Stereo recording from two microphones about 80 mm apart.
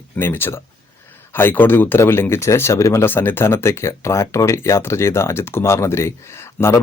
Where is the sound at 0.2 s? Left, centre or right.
Left.